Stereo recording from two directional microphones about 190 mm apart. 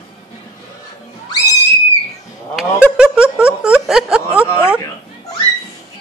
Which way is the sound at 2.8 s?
5° right (ahead or behind).